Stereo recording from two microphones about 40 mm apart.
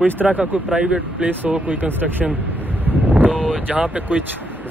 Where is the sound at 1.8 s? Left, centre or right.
Right.